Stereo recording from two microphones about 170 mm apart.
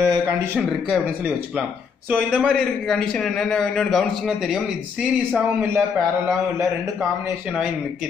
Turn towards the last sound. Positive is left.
turn(degrees=-5)  # may be behind; listen again after turning